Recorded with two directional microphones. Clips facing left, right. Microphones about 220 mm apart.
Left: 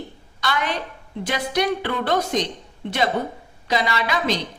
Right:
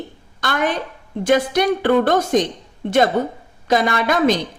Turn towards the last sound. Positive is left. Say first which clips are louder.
# right 6 dB
turn(degrees=-50)  # may be behind; listen again after turning